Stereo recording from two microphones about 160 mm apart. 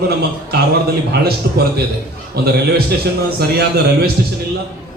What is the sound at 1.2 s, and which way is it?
A man's voice, 75° right (ahead or behind).